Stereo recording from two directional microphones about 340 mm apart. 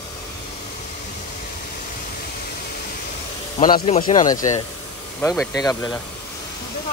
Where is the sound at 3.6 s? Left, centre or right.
Left.